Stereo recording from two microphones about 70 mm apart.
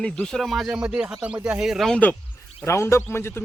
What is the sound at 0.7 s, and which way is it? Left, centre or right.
Speech, centre.